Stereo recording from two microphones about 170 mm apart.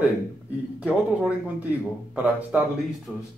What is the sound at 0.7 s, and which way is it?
Speech, 5° right (ahead or behind).